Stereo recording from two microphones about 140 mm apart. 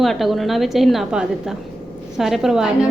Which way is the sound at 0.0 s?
Centre (ahead or behind).